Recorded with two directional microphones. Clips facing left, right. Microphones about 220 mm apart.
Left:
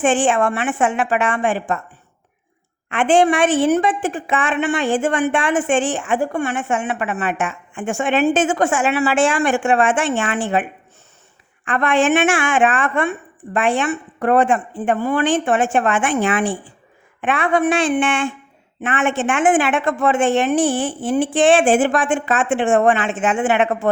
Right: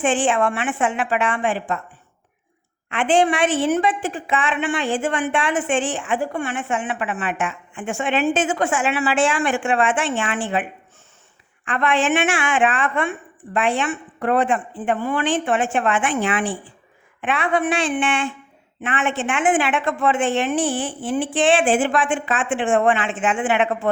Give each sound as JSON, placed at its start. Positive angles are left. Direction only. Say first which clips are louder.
{"t": 0.0, "sound": "a woman's voice", "louder": "left 3 dB", "side_deg": 45}
{"t": 2.9, "sound": "a woman's voice", "louder": "left 3 dB", "side_deg": 50}